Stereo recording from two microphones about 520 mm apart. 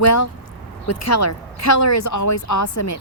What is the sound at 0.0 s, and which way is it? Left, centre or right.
Speech, left.